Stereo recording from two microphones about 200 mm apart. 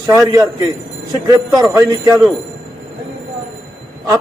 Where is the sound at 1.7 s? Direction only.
10° right (ahead or behind).